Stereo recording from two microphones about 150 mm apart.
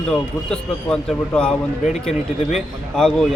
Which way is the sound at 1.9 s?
45° left (ahead or behind).